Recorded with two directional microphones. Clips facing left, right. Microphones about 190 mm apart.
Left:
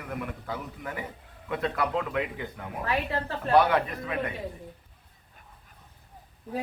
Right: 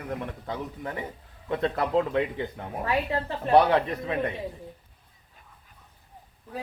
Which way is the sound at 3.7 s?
30° right (ahead or behind).